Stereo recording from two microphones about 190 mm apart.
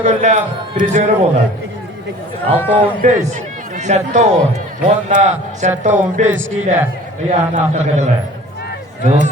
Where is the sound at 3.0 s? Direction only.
40° right (ahead or behind).